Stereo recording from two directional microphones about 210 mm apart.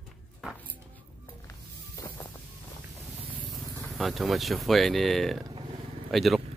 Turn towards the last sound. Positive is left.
turn(degrees=0)  # may be behind; listen again after turning